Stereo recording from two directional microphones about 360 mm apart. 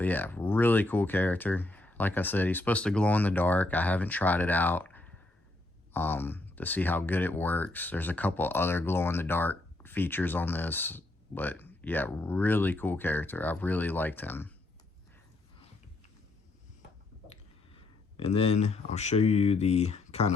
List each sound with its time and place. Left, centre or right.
0.0 s speech: centre
18.2 s speech: centre